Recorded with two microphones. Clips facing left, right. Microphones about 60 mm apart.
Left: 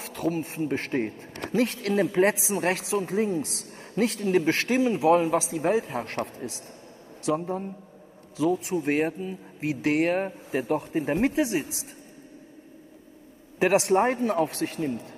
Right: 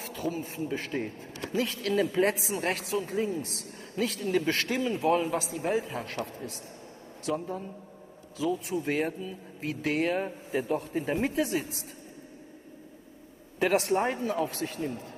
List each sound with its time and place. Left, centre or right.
0.0 s a man's voice: left
4.7 s a man's voice: left
7.3 s speech: left
8.4 s a man's voice: left
8.9 s speech: left
9.6 s a man's voice: left
10.5 s a man's voice: left
11.2 s a man's voice: left
13.7 s speech: left